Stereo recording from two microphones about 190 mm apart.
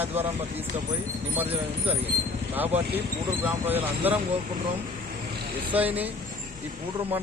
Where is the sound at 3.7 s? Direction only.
10° right (ahead or behind).